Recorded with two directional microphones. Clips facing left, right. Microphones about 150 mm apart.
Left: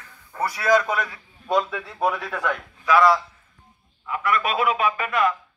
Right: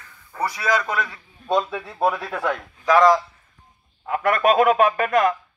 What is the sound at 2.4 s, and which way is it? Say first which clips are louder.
A man's voice: right 2 dB; 35° right (ahead or behind).